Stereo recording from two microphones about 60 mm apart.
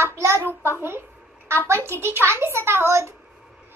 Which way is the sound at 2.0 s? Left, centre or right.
Right.